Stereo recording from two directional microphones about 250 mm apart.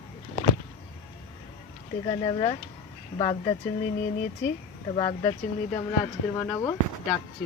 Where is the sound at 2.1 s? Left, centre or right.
Centre.